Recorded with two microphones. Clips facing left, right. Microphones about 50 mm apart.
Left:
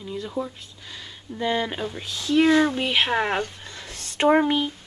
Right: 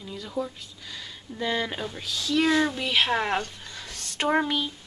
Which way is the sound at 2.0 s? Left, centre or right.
Left.